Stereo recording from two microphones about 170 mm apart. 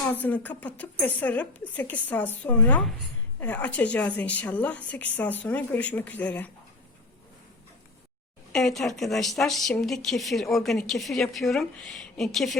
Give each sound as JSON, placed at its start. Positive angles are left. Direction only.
{"t": 0.1, "sound": "a woman's voice", "side_deg": 10}
{"t": 8.5, "sound": "speech", "side_deg": 0}